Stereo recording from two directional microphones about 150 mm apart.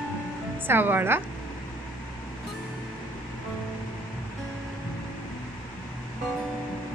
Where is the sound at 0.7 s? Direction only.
15° right (ahead or behind).